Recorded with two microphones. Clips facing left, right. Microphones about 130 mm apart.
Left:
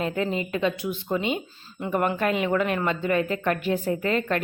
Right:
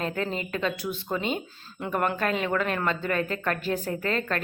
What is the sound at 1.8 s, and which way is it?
A woman's voice, 10° left (ahead or behind).